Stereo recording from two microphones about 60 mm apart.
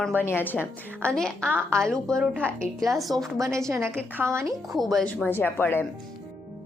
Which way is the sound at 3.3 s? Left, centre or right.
Right.